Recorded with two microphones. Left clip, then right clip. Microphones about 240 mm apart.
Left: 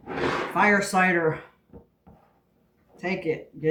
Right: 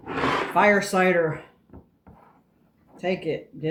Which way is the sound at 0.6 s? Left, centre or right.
Centre.